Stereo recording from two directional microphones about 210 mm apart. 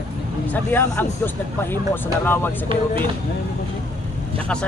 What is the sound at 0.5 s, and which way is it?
A man's voice, 10° left (ahead or behind).